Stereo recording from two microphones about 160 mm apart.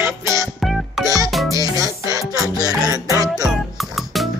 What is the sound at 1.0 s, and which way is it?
Music, 20° right (ahead or behind).